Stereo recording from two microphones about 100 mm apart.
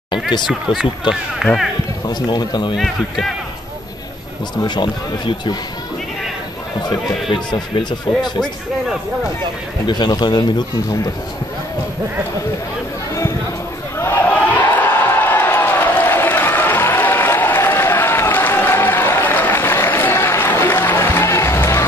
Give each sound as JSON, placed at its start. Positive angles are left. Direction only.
{"t": 0.5, "sound": "speech", "side_deg": -5}
{"t": 2.0, "sound": "speech", "side_deg": 45}
{"t": 2.7, "sound": "speech", "side_deg": 0}
{"t": 4.6, "sound": "speech", "side_deg": 50}
{"t": 7.2, "sound": "speech", "side_deg": 50}
{"t": 8.2, "sound": "speech", "side_deg": 0}
{"t": 9.8, "sound": "speech", "side_deg": 45}
{"t": 13.9, "sound": "a sound", "side_deg": 25}